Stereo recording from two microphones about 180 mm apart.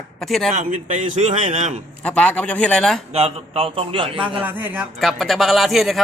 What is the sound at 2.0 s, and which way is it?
A man's voice, 5° left (ahead or behind).